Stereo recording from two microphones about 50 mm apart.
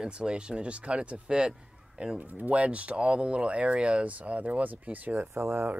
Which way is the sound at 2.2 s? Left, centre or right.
Right.